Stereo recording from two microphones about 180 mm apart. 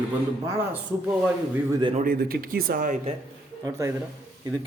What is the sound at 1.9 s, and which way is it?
Speech, 50° right (ahead or behind).